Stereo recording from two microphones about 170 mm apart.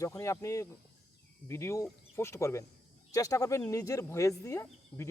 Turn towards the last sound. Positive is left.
turn(degrees=15)  # may be behind; listen again after turning